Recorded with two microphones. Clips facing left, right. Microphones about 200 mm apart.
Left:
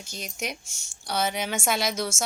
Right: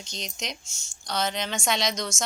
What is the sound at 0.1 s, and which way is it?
A woman's voice, 10° left (ahead or behind).